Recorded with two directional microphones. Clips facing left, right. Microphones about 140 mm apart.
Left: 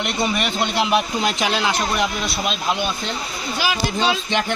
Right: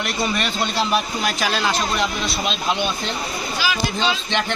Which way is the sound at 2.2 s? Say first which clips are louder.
Even; centre (ahead or behind).